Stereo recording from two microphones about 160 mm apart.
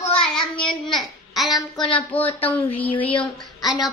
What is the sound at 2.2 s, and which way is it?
Speech, 10° left (ahead or behind).